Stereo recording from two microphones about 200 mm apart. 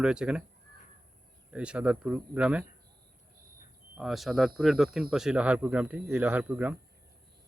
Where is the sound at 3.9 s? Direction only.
Centre (ahead or behind).